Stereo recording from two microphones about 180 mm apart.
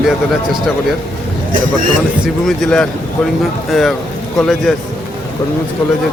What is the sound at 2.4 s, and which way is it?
Speech, 5° left (ahead or behind).